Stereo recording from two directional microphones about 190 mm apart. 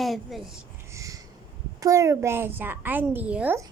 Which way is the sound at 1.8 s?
15° right (ahead or behind).